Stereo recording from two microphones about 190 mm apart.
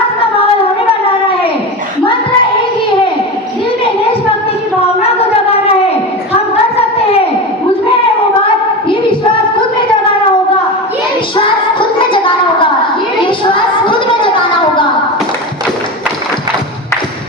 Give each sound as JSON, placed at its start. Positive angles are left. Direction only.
{"t": 6.3, "sound": "child singing", "side_deg": 30}
{"t": 11.3, "sound": "child singing", "side_deg": 25}
{"t": 13.2, "sound": "a sound", "side_deg": 25}